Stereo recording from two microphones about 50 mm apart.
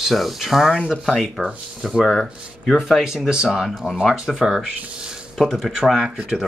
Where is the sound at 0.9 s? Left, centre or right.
Centre.